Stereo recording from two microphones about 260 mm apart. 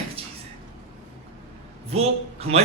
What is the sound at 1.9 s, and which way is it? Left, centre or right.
Speech, right.